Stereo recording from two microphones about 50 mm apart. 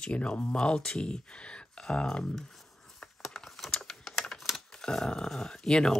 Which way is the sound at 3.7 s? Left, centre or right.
Centre.